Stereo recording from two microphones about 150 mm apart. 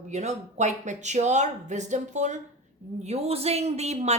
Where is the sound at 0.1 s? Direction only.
50° right (ahead or behind).